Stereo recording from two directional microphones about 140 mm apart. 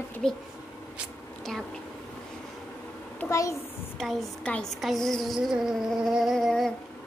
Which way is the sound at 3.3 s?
20° left (ahead or behind).